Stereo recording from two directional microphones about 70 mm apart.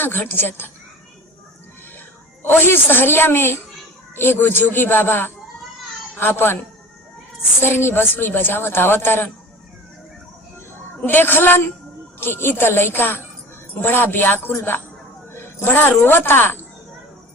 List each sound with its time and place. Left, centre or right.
0.0 s speech: left
2.4 s speech: left
7.6 s speech: left
11.0 s a man's voice: left